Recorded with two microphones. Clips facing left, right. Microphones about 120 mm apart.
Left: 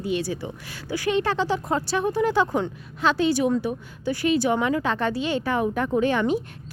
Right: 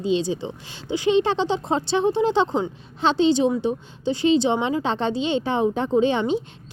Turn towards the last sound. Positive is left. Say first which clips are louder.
# right 2 dB
turn(degrees=-25)  # may be behind; listen again after turning